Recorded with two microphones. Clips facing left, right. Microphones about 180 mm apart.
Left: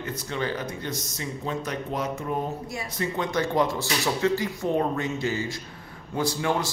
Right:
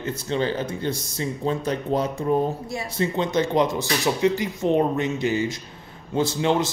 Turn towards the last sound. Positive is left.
turn(degrees=-25)  # may be behind; listen again after turning